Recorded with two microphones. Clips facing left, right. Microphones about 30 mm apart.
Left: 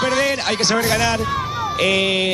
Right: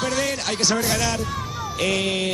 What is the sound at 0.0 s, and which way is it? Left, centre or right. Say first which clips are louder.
A man's voice: left 5 dB; left.